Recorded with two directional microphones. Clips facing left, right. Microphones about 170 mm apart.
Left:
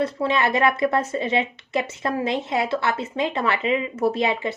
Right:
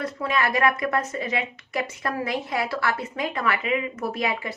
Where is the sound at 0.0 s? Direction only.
25° left (ahead or behind).